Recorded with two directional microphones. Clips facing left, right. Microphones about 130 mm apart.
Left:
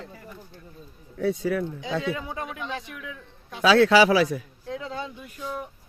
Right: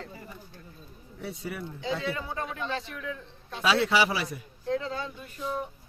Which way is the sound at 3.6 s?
90° left.